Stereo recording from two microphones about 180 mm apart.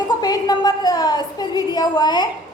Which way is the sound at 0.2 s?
20° left (ahead or behind).